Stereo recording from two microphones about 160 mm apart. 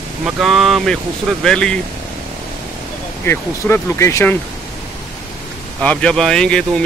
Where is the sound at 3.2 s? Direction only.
15° left (ahead or behind).